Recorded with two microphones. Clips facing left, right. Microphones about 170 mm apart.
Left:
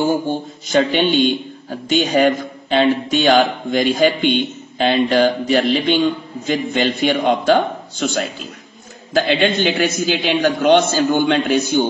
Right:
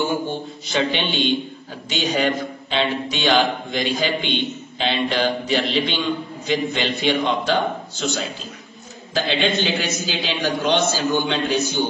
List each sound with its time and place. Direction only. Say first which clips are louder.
0.0 s a man's voice: left 5 dB; 40° left (ahead or behind)